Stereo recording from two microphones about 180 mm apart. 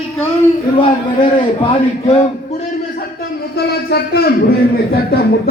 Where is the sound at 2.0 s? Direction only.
35° left (ahead or behind).